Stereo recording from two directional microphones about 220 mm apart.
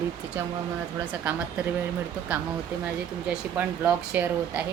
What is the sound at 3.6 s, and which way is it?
Speech, 10° right (ahead or behind).